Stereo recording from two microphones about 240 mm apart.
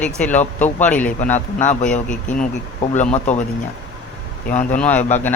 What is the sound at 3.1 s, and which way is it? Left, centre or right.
Speech, left.